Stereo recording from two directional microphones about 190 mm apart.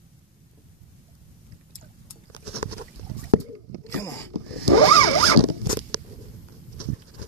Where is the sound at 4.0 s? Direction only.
10° left (ahead or behind).